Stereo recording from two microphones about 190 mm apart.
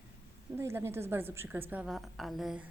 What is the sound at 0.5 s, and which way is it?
A woman's voice, 15° right (ahead or behind).